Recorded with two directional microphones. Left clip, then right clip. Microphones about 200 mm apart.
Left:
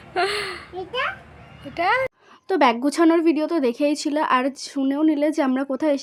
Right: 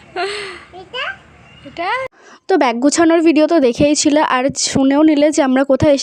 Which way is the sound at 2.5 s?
30° right (ahead or behind).